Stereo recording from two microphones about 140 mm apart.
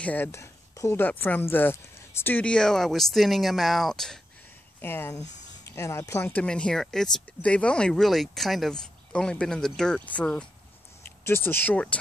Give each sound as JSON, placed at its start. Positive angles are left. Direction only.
{"t": 0.0, "sound": "speech", "side_deg": 10}
{"t": 4.8, "sound": "speech", "side_deg": 15}